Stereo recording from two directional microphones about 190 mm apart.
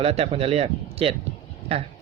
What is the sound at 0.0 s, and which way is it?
Speech, 30° right (ahead or behind).